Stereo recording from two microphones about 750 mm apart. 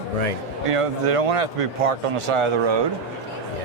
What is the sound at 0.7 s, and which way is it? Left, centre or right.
Speech, right.